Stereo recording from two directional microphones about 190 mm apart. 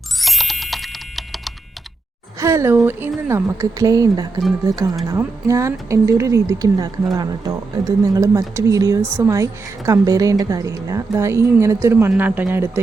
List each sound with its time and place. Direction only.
0.2 s typing: centre (ahead or behind)
2.4 s speech: 15° right (ahead or behind)